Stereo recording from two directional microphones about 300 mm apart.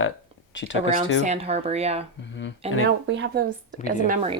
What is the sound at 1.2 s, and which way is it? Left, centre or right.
Speech, right.